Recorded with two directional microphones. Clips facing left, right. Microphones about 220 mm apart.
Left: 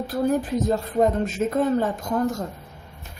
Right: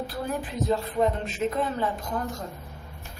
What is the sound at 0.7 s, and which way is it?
A woman's voice, 45° left (ahead or behind).